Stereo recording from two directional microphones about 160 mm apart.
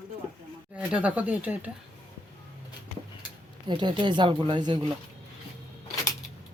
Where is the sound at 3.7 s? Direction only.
30° right (ahead or behind).